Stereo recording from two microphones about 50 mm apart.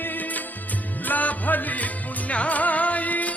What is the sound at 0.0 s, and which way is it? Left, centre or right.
Music, left.